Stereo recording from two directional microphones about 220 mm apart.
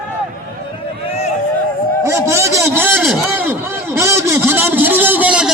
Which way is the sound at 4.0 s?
10° right (ahead or behind).